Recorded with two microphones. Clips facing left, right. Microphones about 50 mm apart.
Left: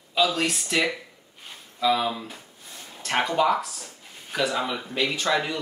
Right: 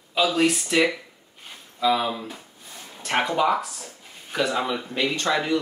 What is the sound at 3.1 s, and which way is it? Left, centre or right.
Speech, centre.